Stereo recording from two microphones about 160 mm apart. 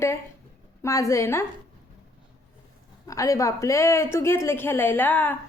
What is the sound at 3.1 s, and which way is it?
A woman's voice, 20° left (ahead or behind).